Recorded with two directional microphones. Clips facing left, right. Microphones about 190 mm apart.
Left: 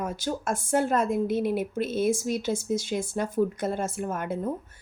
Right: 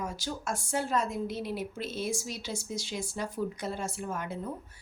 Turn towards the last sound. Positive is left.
turn(degrees=50)  # may be behind; listen again after turning